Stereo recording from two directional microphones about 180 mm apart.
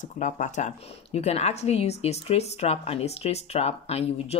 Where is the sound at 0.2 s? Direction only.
45° left (ahead or behind).